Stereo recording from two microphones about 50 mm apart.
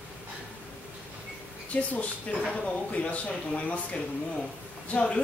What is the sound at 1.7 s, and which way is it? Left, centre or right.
Speech, left.